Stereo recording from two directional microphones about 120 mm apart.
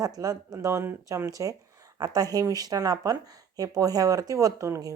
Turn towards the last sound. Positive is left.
turn(degrees=-25)  # may be behind; listen again after turning